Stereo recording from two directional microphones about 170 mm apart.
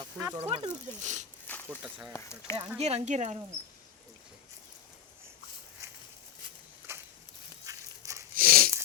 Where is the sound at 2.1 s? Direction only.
15° left (ahead or behind).